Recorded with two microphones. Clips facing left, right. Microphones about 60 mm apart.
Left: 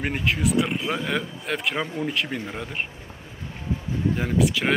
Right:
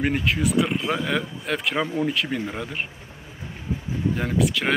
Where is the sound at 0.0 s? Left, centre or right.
Centre.